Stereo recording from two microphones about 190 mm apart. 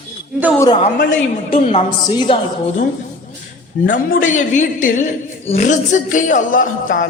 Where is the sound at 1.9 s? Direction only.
25° left (ahead or behind).